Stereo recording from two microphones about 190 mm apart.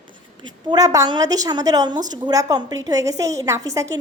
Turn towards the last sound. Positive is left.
turn(degrees=-15)  # may be behind; listen again after turning